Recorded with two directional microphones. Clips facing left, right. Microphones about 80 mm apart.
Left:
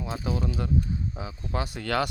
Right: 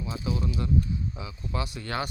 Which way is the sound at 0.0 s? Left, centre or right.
Left.